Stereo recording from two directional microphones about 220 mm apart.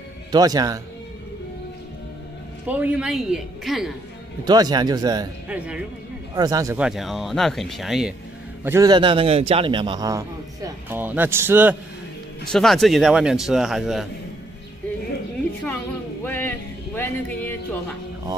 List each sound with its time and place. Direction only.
0.3 s a man's voice: 15° right (ahead or behind)
2.7 s a man's voice: 5° right (ahead or behind)
4.5 s a man's voice: 20° right (ahead or behind)
6.3 s a man's voice: 15° right (ahead or behind)
6.8 s a man's voice: centre (ahead or behind)
8.6 s a man's voice: 15° right (ahead or behind)
12.4 s a man's voice: centre (ahead or behind)
16.3 s music: 10° left (ahead or behind)